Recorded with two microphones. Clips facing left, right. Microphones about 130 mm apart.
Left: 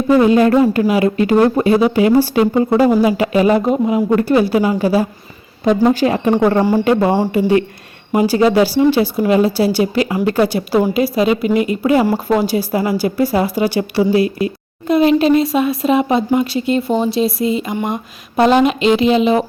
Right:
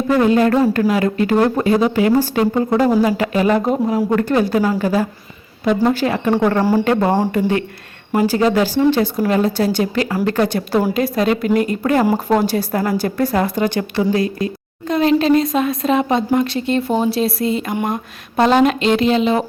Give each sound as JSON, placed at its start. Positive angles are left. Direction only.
{"t": 0.1, "sound": "speech", "side_deg": 20}
{"t": 3.6, "sound": "a woman's voice", "side_deg": 0}